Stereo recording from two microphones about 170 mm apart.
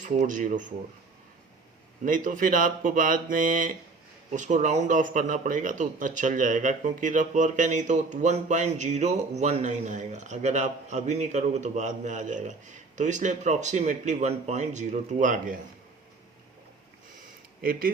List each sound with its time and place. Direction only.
0.0 s a man's voice: 50° right (ahead or behind)
2.0 s a man's voice: 50° right (ahead or behind)
17.6 s speech: 55° right (ahead or behind)